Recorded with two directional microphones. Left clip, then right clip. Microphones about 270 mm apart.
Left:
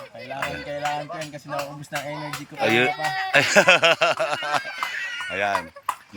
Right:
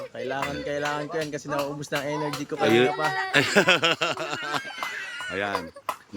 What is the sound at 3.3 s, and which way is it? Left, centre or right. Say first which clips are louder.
Speech: left 5 dB; centre.